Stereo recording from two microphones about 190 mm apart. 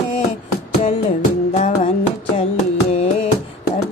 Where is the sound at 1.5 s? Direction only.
35° left (ahead or behind).